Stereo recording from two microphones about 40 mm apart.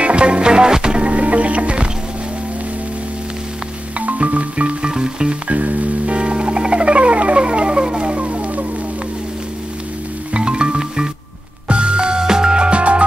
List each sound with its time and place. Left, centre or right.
0.0 s music: right
4.0 s music: right
4.9 s music: right
5.5 s music: right
10.3 s music: right